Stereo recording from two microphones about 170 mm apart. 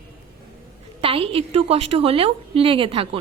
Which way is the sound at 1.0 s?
35° right (ahead or behind).